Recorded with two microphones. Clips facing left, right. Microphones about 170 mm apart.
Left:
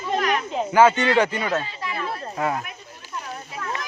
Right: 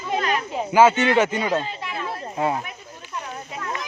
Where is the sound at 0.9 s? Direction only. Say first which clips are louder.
Right 1 dB; 20° right (ahead or behind).